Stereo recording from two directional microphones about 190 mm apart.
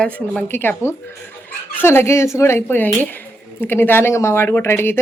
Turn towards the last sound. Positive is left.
turn(degrees=10)  # may be behind; listen again after turning